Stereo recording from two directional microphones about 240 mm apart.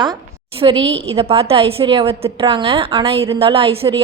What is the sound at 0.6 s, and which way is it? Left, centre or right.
A woman's voice, centre.